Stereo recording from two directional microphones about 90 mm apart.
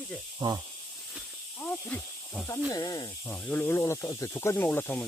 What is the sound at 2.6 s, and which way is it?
Speech, 45° left (ahead or behind).